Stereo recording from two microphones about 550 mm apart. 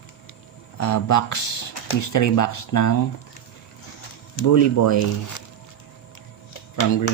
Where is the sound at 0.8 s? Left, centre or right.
Left.